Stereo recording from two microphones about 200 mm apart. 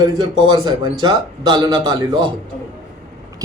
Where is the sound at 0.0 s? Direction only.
20° right (ahead or behind).